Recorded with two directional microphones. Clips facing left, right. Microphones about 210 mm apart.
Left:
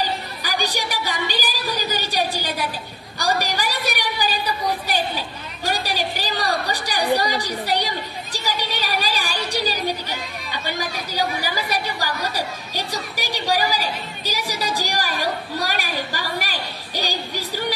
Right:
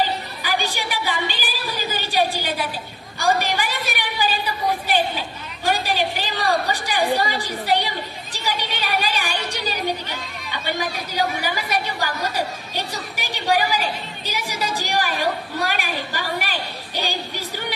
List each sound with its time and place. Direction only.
0.4 s a woman's voice: 40° left (ahead or behind)
5.7 s a woman's voice: 40° left (ahead or behind)
11.4 s a woman's voice: 35° left (ahead or behind)
15.6 s a sound: 40° left (ahead or behind)